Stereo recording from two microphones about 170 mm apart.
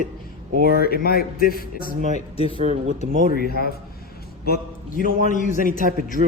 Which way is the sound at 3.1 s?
55° right (ahead or behind).